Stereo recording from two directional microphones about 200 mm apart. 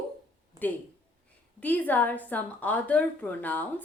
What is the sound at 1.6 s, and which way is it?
A woman's voice, 10° left (ahead or behind).